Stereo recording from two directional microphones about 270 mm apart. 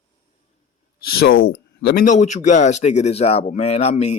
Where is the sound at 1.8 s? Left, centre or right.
Left.